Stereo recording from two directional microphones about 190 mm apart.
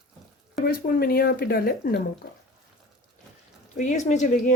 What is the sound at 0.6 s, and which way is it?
Speech, 55° left (ahead or behind).